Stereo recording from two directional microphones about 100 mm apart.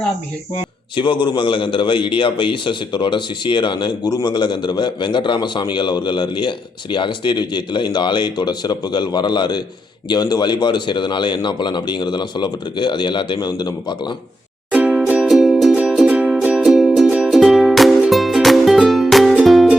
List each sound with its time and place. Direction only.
0.9 s a man's voice: 50° left (ahead or behind)
14.7 s music: 10° right (ahead or behind)
15.3 s music: centre (ahead or behind)